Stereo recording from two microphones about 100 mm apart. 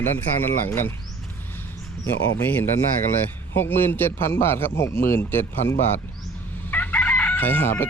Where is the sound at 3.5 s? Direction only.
20° left (ahead or behind).